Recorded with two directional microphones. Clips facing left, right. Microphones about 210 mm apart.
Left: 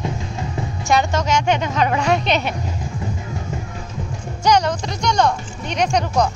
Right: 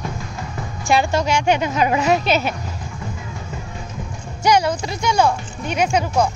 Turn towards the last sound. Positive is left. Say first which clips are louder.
# even
turn(degrees=-5)  # may be behind; listen again after turning